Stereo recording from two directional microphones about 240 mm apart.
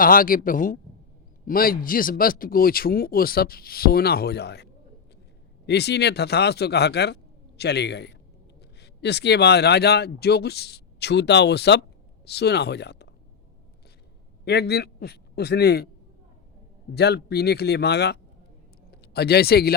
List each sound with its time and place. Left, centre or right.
0.0 s speech: left
14.4 s a man's voice: left
16.9 s speech: left